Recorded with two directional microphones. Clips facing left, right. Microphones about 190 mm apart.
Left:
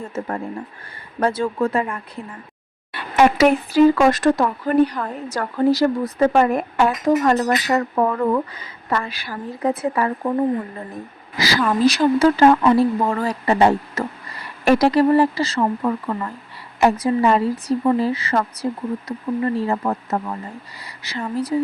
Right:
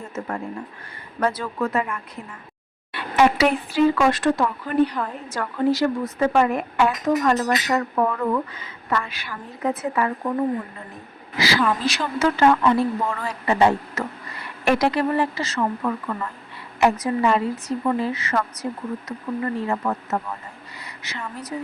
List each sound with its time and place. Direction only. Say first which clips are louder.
0.0 s speech: left 3 dB; 30° left (ahead or behind)
2.9 s speech: left 2 dB; 45° left (ahead or behind)
11.3 s speech: left 3 dB; 40° left (ahead or behind)